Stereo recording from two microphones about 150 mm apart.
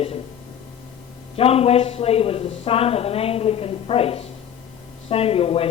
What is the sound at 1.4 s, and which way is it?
Speech, 40° left (ahead or behind).